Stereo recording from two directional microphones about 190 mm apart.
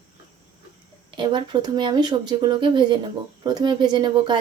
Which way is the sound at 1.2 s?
25° right (ahead or behind).